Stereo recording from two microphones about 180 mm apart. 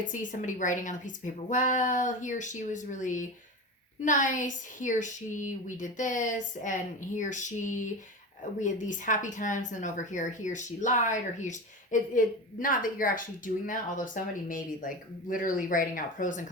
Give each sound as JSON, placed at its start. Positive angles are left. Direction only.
{"t": 0.0, "sound": "speech", "side_deg": 45}